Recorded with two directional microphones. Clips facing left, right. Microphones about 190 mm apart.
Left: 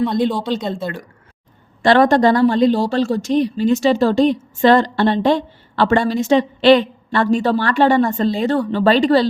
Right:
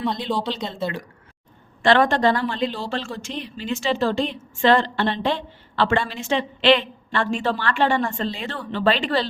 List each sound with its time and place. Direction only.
0.3 s speech: 50° left (ahead or behind)
1.8 s speech: 40° left (ahead or behind)